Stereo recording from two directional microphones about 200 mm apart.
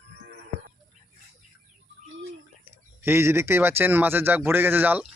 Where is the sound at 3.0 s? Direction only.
10° right (ahead or behind).